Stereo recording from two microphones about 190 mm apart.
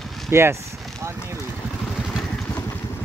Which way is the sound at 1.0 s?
15° right (ahead or behind).